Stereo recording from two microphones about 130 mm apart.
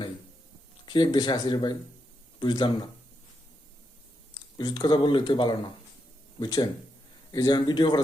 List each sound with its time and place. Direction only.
0.9 s speech: 35° left (ahead or behind)
4.5 s speech: 35° left (ahead or behind)